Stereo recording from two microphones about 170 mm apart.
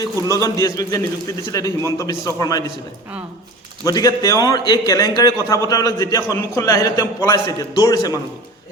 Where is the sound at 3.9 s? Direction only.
20° left (ahead or behind).